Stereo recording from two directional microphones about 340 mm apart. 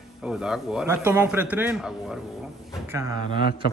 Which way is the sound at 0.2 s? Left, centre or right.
Centre.